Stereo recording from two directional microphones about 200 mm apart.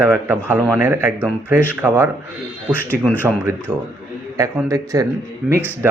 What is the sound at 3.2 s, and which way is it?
A man's voice, 10° right (ahead or behind).